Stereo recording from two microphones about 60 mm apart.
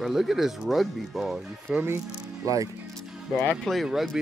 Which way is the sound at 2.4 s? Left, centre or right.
Right.